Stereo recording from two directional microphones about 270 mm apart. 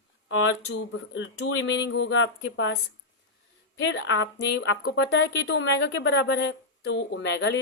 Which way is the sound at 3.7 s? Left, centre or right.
Left.